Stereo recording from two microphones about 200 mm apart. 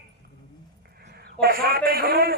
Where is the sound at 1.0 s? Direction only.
50° right (ahead or behind).